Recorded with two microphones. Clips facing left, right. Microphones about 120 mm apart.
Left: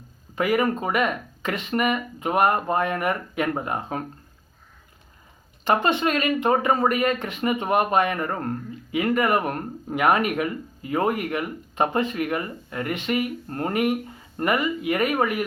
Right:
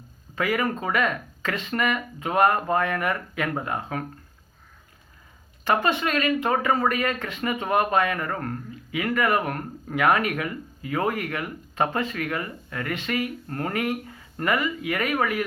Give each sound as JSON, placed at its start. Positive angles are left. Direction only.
{"t": 0.3, "sound": "speech", "side_deg": 25}
{"t": 5.6, "sound": "speech", "side_deg": 20}